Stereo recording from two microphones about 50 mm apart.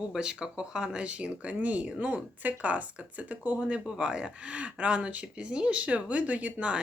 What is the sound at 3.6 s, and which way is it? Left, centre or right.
Speech, right.